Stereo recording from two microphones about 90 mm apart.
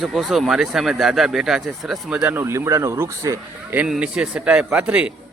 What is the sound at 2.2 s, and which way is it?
Speech, 25° right (ahead or behind).